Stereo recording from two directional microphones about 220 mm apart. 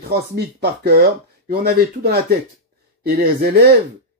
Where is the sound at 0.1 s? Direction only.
45° right (ahead or behind).